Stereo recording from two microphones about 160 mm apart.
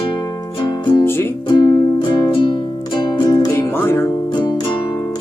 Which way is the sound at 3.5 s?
15° left (ahead or behind).